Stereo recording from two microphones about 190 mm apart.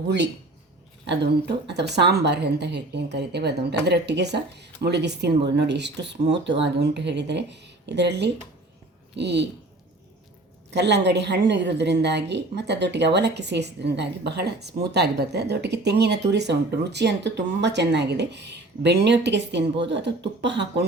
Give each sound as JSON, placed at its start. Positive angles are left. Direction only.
{"t": 1.0, "sound": "a woman's voice", "side_deg": -65}
{"t": 10.7, "sound": "a woman's voice", "side_deg": -65}